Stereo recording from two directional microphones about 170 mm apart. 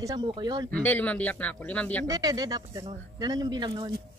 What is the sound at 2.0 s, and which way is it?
Speech, 20° right (ahead or behind).